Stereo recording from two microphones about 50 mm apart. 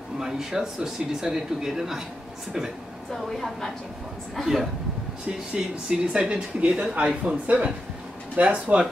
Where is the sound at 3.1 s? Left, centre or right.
Centre.